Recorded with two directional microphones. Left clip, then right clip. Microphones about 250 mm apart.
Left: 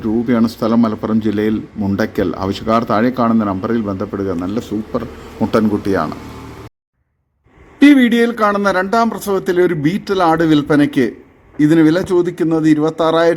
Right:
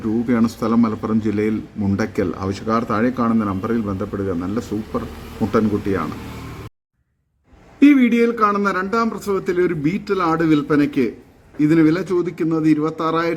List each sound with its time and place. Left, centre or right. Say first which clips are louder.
0.0 s a man's voice: left 4 dB; centre
7.9 s speech: left 4 dB; centre